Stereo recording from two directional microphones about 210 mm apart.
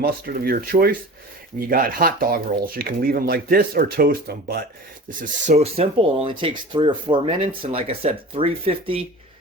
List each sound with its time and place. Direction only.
0.0 s speech: 45° right (ahead or behind)
5.0 s speech: 35° right (ahead or behind)